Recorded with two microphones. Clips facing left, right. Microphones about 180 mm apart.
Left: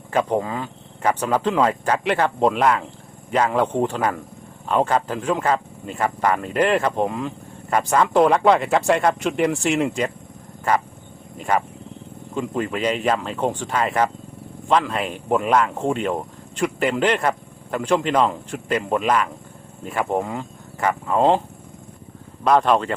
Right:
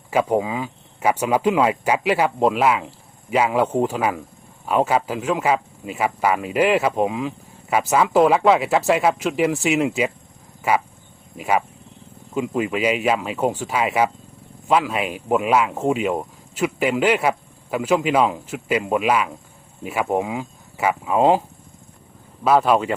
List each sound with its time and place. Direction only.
0.1 s a man's voice: 10° right (ahead or behind)
22.4 s speech: 5° right (ahead or behind)